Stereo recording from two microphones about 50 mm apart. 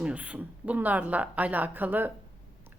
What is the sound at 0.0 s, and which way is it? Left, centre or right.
A woman's voice, right.